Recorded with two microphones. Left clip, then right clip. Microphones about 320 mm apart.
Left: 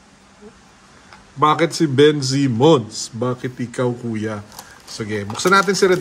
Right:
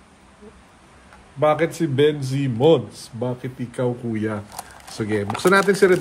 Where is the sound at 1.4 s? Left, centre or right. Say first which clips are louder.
Left 3 dB; centre.